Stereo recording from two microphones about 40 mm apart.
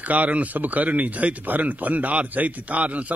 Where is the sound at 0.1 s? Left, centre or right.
Right.